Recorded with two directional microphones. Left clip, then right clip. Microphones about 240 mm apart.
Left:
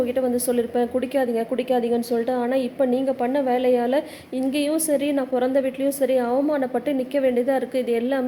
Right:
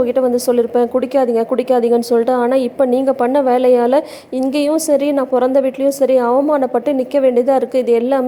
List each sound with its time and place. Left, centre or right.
0.0 s speech: right